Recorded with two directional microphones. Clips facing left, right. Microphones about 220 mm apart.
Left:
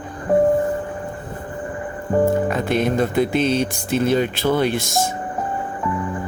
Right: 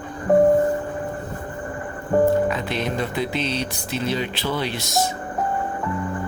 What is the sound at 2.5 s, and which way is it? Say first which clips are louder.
Speech: left 5 dB; 50° left (ahead or behind).